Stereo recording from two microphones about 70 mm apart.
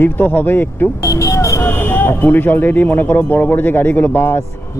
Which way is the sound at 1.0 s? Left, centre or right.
Left.